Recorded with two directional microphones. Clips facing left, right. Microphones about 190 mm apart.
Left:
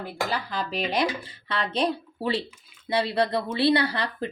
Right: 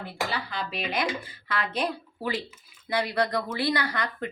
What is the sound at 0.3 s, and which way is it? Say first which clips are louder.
A woman's voice: left 3 dB; 40° left (ahead or behind).